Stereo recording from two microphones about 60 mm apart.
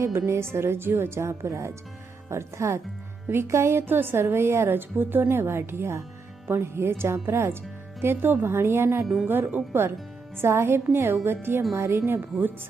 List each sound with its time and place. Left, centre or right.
0.3 s a woman's voice: right